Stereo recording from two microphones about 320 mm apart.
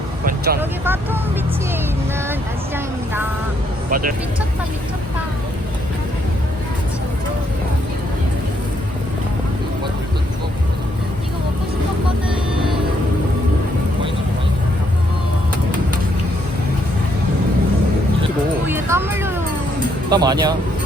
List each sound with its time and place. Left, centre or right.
0.3 s vehicle: right
0.6 s speech: centre
3.8 s speech: right
18.7 s a sound: centre
20.1 s speech: centre